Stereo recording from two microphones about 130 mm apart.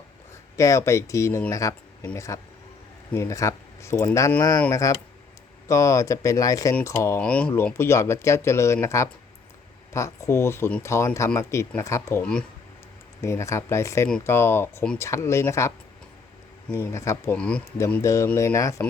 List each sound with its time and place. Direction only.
0.5 s speech: 25° left (ahead or behind)
7.2 s speech: 10° left (ahead or behind)
12.2 s speech: 5° left (ahead or behind)
13.2 s speech: 20° left (ahead or behind)
16.7 s speech: 20° left (ahead or behind)
17.3 s speech: 10° left (ahead or behind)
17.7 s speech: 25° left (ahead or behind)